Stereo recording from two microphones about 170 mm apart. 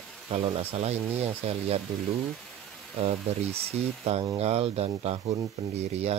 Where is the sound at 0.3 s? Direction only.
35° right (ahead or behind).